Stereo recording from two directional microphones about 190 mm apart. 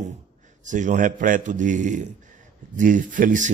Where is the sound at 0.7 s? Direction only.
40° right (ahead or behind).